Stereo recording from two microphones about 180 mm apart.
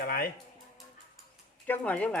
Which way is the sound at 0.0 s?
55° left (ahead or behind).